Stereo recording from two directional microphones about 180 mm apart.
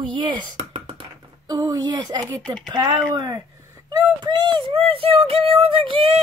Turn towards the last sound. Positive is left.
turn(degrees=-30)  # may be behind; listen again after turning